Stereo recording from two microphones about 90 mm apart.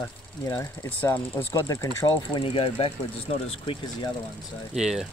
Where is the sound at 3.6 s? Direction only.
75° left (ahead or behind).